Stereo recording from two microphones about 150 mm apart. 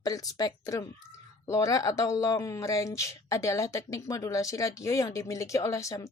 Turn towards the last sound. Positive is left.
turn(degrees=20)  # may be behind; listen again after turning